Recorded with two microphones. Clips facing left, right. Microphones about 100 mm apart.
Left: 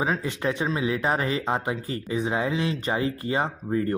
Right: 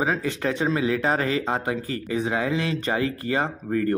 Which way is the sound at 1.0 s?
20° left (ahead or behind).